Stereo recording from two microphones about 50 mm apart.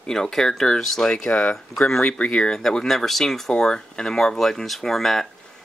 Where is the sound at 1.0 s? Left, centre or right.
Left.